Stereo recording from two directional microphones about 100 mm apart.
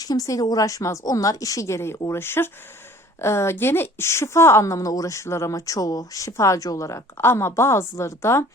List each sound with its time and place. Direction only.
0.0 s a woman's voice: 40° left (ahead or behind)